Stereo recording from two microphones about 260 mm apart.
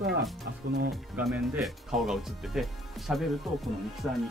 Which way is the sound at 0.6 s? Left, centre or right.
Right.